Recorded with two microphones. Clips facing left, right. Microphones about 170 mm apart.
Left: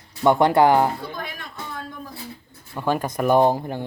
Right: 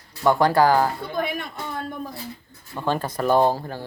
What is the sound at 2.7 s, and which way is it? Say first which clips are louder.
Speech: left 2 dB; 10° left (ahead or behind).